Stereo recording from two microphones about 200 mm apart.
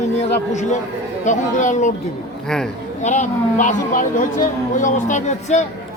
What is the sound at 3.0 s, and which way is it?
A woman's voice, 35° left (ahead or behind).